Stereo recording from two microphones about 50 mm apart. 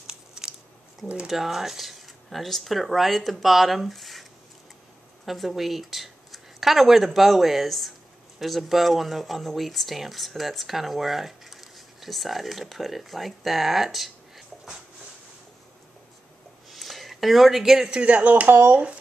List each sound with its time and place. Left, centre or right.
0.0 s biting: centre
1.2 s speech: centre
16.7 s speech: centre
18.0 s speech: right